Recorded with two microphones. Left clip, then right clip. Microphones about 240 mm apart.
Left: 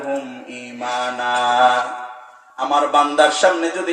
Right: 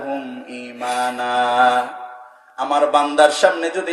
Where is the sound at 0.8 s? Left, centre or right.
Right.